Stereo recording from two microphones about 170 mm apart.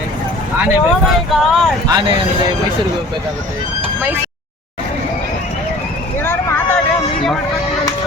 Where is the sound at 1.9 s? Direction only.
25° right (ahead or behind).